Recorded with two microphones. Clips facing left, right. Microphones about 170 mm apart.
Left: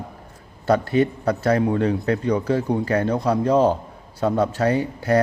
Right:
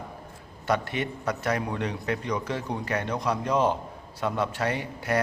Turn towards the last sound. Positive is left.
turn(degrees=35)  # may be behind; listen again after turning